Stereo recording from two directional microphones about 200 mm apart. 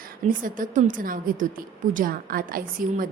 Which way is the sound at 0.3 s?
40° right (ahead or behind).